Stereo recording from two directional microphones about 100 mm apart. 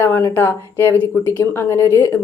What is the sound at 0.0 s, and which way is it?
A woman's voice, 25° left (ahead or behind).